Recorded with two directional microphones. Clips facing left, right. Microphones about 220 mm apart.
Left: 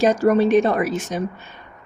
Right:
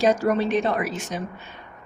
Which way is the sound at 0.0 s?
45° left (ahead or behind).